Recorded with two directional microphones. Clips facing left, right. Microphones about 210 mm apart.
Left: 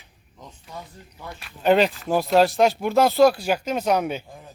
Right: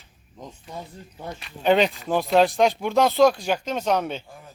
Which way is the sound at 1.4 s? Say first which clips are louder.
Left 1 dB; centre (ahead or behind).